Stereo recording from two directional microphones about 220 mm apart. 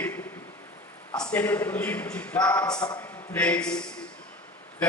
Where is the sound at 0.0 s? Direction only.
10° left (ahead or behind).